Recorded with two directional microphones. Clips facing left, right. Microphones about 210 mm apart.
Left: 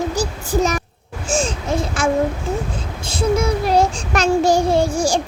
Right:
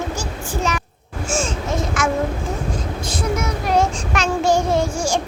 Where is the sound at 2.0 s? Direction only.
30° left (ahead or behind).